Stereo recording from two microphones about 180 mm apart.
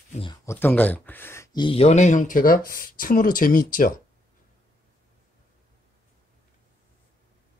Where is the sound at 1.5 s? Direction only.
30° left (ahead or behind); by 3.9 s 50° left (ahead or behind).